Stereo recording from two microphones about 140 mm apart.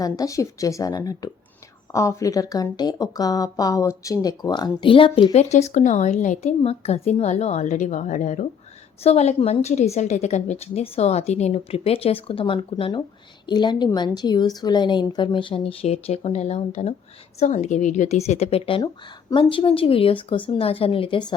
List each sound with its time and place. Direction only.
0.0 s speech: 25° left (ahead or behind); by 6.5 s 60° left (ahead or behind)
6.6 s a woman's voice: 45° left (ahead or behind); by 8.4 s 65° left (ahead or behind)
9.0 s a woman's voice: 50° left (ahead or behind)